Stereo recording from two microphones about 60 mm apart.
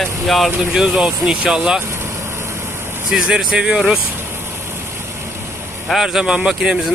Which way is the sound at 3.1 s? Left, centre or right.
Centre.